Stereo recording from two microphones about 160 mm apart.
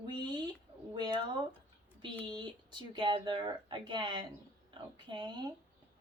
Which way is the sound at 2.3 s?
30° right (ahead or behind).